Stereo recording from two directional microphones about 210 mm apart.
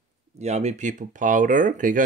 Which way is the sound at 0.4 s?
30° right (ahead or behind).